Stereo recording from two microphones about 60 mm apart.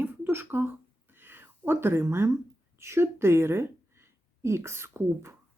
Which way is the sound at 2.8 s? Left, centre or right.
Right.